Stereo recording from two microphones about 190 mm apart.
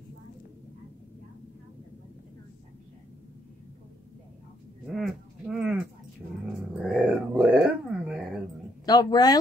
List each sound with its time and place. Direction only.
4.9 s livestock: centre (ahead or behind)
6.8 s dog: 5° right (ahead or behind)
8.8 s speech: 20° left (ahead or behind)